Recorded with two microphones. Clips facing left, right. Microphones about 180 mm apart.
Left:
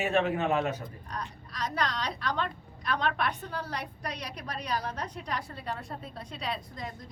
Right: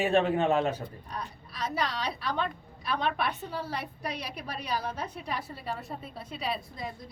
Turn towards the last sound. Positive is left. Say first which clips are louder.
# right 2 dB
turn(degrees=-5)  # may be behind; listen again after turning